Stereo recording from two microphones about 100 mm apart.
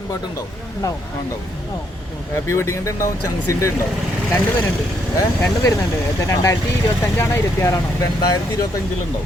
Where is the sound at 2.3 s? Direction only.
25° left (ahead or behind).